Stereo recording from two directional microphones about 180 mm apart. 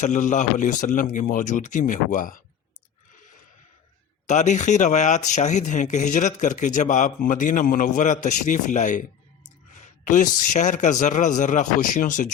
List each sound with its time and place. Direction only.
0.0 s speech: 45° left (ahead or behind)
4.3 s speech: 40° left (ahead or behind)